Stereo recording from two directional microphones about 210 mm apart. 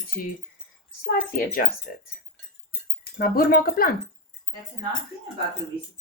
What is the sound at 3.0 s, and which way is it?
Speech, 45° left (ahead or behind).